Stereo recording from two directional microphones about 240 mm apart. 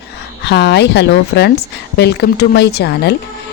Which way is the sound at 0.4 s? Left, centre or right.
Left.